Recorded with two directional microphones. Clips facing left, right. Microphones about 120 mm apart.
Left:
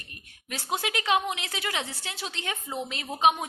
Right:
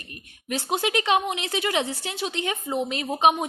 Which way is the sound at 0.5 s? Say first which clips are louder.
Right 6 dB; 20° right (ahead or behind).